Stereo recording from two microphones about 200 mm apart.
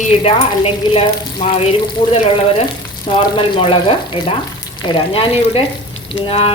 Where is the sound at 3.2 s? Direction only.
25° left (ahead or behind).